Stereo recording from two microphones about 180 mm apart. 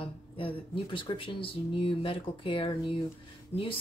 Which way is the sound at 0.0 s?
30° left (ahead or behind).